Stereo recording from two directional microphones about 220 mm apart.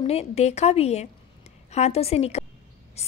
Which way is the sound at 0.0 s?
30° left (ahead or behind).